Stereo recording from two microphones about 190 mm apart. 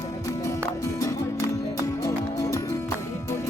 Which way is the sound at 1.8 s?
15° left (ahead or behind).